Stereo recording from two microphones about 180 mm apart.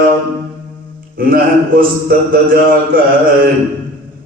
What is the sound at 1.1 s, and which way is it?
A man's voice, 55° right (ahead or behind).